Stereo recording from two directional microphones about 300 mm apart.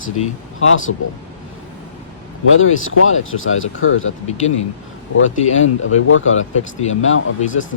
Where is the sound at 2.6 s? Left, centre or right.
Left.